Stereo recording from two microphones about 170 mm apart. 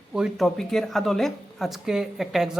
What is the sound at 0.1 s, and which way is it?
A man's voice, centre (ahead or behind).